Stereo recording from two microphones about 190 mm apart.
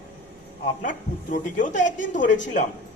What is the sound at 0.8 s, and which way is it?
Speech, 45° left (ahead or behind).